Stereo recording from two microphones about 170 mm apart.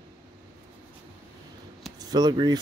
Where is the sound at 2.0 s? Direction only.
25° right (ahead or behind).